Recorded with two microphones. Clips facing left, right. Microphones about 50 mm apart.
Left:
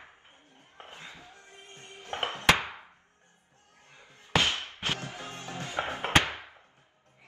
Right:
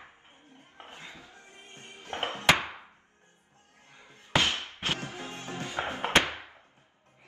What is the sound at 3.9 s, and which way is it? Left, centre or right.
Slam, right.